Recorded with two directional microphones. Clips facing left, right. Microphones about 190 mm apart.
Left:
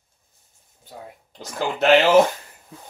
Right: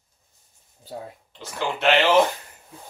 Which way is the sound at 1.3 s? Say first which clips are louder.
Left 2 dB; 40° left (ahead or behind).